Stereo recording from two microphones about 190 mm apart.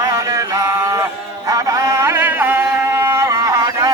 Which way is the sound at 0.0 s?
15° right (ahead or behind).